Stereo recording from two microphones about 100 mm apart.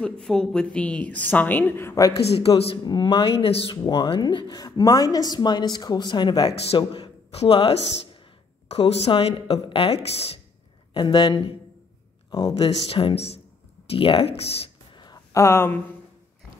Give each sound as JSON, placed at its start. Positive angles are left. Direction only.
{"t": 0.0, "sound": "a woman's voice", "side_deg": 5}
{"t": 2.3, "sound": "a woman's voice", "side_deg": 75}
{"t": 2.8, "sound": "speech", "side_deg": 50}
{"t": 3.9, "sound": "speech", "side_deg": 50}
{"t": 7.2, "sound": "speech", "side_deg": 80}
{"t": 8.6, "sound": "a woman's voice", "side_deg": 90}
{"t": 9.2, "sound": "speech", "side_deg": 80}
{"t": 10.9, "sound": "speech", "side_deg": 50}
{"t": 12.8, "sound": "speech", "side_deg": 80}
{"t": 13.8, "sound": "speech", "side_deg": 70}
{"t": 15.3, "sound": "speech", "side_deg": 25}